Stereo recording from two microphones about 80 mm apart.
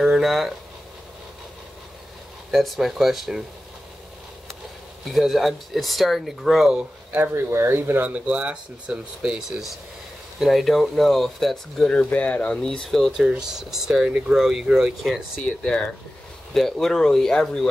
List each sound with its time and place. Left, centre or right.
0.0 s speech: centre
2.5 s speech: centre
5.1 s speech: centre
6.7 s speech: centre
7.2 s speech: right; by 12.0 s centre
12.0 s speech: centre
13.2 s speech: centre
16.5 s speech: centre